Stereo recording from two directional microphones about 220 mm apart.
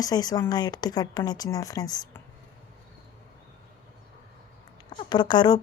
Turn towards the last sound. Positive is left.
turn(degrees=20)  # may be behind; listen again after turning